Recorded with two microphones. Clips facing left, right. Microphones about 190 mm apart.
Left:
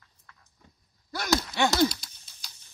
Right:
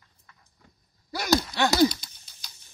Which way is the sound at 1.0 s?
5° right (ahead or behind).